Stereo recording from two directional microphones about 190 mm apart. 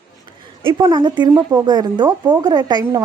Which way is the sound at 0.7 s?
20° right (ahead or behind).